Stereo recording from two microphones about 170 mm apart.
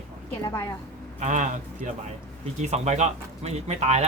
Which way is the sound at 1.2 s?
45° right (ahead or behind).